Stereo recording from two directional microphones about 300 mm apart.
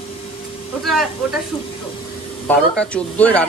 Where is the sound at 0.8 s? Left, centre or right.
Centre.